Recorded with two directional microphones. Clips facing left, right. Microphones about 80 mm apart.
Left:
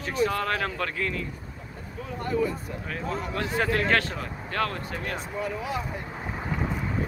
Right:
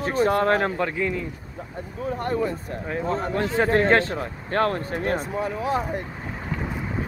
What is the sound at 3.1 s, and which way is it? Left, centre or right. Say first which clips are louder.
Speech: right 5 dB; right.